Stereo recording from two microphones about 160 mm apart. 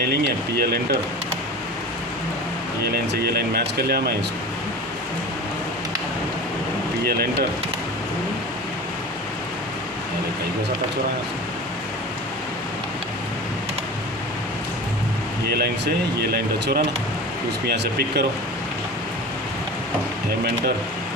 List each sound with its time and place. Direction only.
0.6 s speech: 80° right
2.9 s speech: 80° right
7.0 s speech: 80° right
15.4 s speech: 80° right